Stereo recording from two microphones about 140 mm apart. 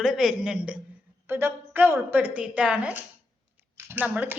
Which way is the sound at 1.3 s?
15° right (ahead or behind).